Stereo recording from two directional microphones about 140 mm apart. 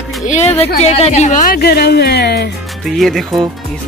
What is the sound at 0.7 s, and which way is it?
A woman's voice, 50° left (ahead or behind).